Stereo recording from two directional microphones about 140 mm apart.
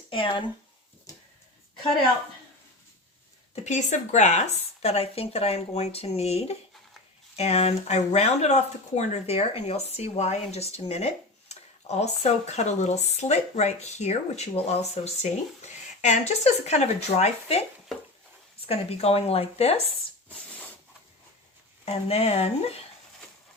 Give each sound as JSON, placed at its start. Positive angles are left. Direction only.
{"t": 0.1, "sound": "speech", "side_deg": 35}
{"t": 3.5, "sound": "speech", "side_deg": 55}
{"t": 21.8, "sound": "speech", "side_deg": 45}